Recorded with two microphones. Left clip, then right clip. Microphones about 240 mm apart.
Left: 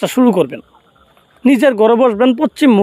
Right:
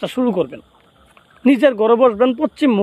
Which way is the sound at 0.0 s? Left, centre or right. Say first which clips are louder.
Left 6 dB; left.